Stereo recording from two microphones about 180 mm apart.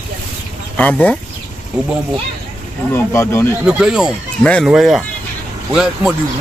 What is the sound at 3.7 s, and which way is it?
Speech, 5° right (ahead or behind).